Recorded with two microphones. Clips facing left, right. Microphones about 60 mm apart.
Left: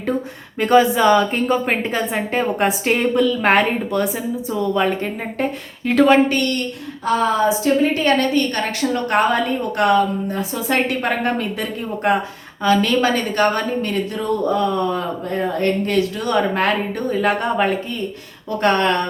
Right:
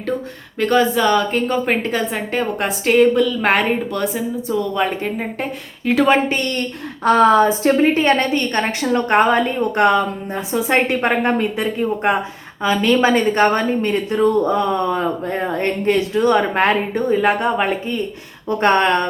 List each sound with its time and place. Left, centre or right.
0.6 s a woman's voice: centre
6.1 s a woman's voice: centre
7.0 s speech: right
7.9 s a woman's voice: right